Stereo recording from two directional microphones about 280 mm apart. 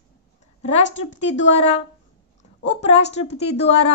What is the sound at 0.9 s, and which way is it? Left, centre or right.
A woman's voice, left.